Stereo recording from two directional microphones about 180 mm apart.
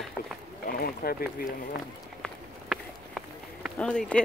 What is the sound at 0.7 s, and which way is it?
Speech, 55° left (ahead or behind).